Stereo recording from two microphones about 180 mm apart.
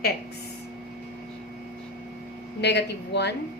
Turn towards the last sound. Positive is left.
turn(degrees=70)  # may be behind; listen again after turning